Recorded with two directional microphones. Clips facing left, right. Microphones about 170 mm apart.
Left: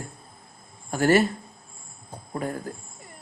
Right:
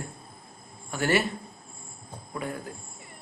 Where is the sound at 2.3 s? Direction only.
40° left (ahead or behind).